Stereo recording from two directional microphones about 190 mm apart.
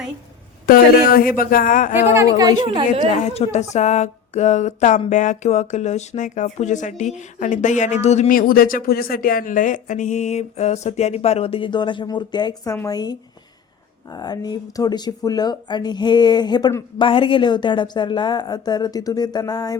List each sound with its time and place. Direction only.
0.7 s speech: 50° left (ahead or behind)
2.4 s a woman's voice: 25° right (ahead or behind)
3.3 s speech: 35° left (ahead or behind)